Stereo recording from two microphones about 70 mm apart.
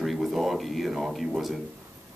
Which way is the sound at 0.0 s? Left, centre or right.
Centre.